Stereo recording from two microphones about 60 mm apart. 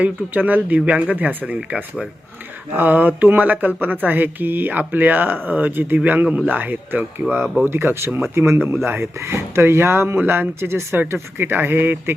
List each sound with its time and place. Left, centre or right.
0.0 s speech: right